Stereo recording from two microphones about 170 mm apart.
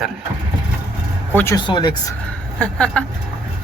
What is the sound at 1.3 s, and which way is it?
Speech, 15° left (ahead or behind).